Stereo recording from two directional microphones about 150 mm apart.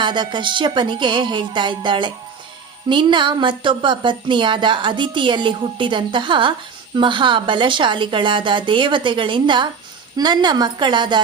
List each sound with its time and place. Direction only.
0.0 s a woman's voice: 30° right (ahead or behind)